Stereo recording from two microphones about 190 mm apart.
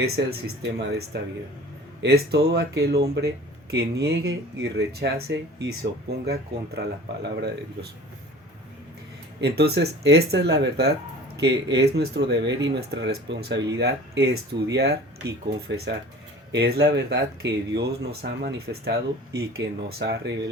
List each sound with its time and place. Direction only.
0.4 s speech: 65° right (ahead or behind)
9.4 s speech: 60° right (ahead or behind)